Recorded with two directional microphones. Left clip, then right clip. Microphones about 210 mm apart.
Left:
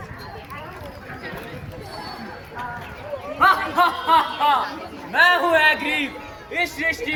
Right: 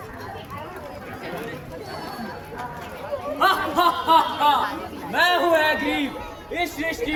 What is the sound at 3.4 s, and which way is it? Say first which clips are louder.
A man's voice: left 3 dB; 30° right (ahead or behind).